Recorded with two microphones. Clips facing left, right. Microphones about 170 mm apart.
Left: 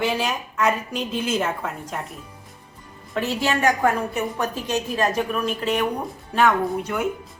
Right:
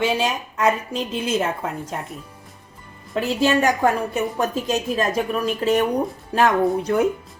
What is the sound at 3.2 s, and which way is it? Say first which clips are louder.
Speech: right 4 dB; 35° right (ahead or behind).